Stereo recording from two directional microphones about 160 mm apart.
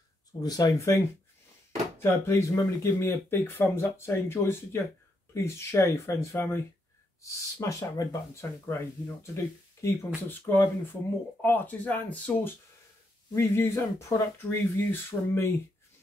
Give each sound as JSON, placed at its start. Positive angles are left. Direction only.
{"t": 0.4, "sound": "speech", "side_deg": 25}